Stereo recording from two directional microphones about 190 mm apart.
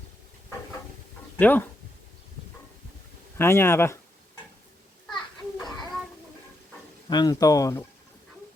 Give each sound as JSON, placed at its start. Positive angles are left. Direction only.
{"t": 1.4, "sound": "speech", "side_deg": 10}
{"t": 3.3, "sound": "speech", "side_deg": 10}
{"t": 5.0, "sound": "children playing", "side_deg": 0}
{"t": 7.1, "sound": "speech", "side_deg": 20}